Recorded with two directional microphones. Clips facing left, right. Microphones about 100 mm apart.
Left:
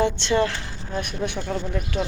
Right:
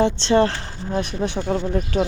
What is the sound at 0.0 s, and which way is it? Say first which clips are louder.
A woman's voice: right 4 dB; 30° right (ahead or behind).